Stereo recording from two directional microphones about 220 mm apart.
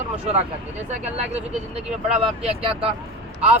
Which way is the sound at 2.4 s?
25° right (ahead or behind).